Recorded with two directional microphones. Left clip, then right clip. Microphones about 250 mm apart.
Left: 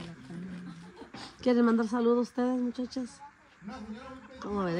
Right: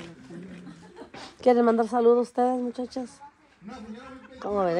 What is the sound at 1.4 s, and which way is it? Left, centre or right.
A woman's voice, centre.